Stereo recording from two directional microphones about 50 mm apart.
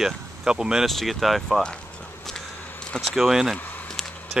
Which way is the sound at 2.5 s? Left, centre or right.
Left.